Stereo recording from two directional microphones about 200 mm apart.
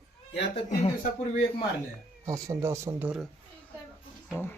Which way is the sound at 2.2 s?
15° right (ahead or behind).